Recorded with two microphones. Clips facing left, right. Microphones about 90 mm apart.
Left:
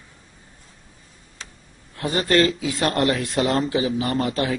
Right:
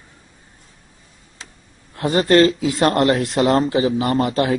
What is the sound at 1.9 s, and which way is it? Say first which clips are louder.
Speech: right 5 dB; 35° right (ahead or behind).